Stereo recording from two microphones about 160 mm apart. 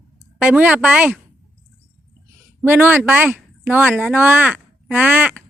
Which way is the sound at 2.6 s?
15° right (ahead or behind).